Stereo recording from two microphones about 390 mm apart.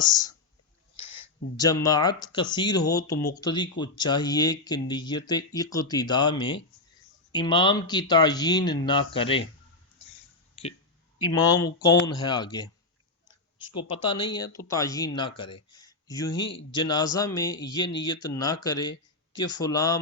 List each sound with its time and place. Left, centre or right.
0.0 s speech: centre
1.5 s speech: centre
10.5 s a sound: centre
11.3 s speech: centre
13.7 s speech: centre